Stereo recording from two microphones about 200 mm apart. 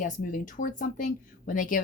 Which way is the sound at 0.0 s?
40° left (ahead or behind).